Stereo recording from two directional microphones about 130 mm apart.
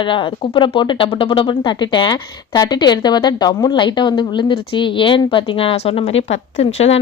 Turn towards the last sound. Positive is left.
turn(degrees=55)  # may be behind; listen again after turning